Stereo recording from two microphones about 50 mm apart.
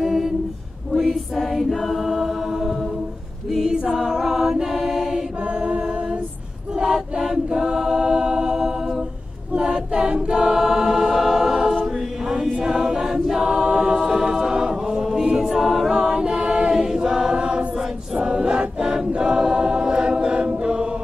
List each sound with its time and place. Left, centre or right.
0.0 s a capella: centre
0.9 s choir: centre
3.6 s choir: centre
5.5 s a capella: centre
6.8 s choir: centre